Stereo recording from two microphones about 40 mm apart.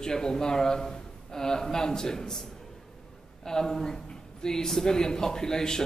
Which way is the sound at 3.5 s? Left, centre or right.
Centre.